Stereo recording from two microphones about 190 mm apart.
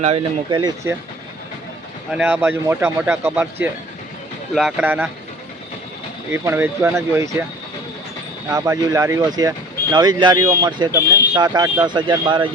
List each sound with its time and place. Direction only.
0.5 s speech: 20° right (ahead or behind)
2.0 s speech: 5° right (ahead or behind)
6.3 s speech: 10° right (ahead or behind)
8.4 s speech: 15° right (ahead or behind)